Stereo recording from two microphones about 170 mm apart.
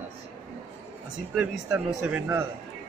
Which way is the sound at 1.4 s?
5° right (ahead or behind).